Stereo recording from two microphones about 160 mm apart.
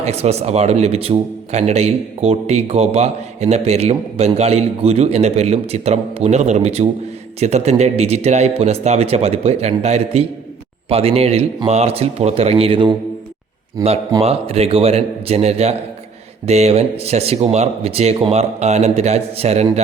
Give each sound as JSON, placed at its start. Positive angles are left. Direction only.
{"t": 0.0, "sound": "a man's voice", "side_deg": -40}
{"t": 14.2, "sound": "a man's voice", "side_deg": -40}